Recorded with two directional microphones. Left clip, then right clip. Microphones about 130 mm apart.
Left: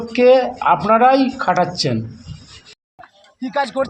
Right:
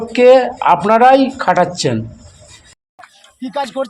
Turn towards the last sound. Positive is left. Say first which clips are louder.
# even
turn(degrees=-10)  # may be behind; listen again after turning